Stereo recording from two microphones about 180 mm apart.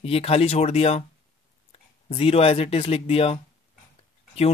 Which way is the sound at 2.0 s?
30° left (ahead or behind).